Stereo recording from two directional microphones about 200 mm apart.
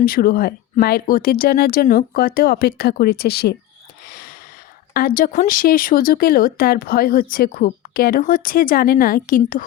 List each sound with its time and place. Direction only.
0.0 s speech: 50° left (ahead or behind)
4.0 s a sound: 50° left (ahead or behind)
4.9 s speech: 45° left (ahead or behind)